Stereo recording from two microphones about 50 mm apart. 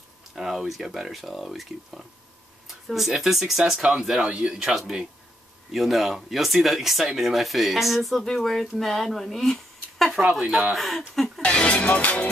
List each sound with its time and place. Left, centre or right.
0.4 s speech: centre
11.4 s music: left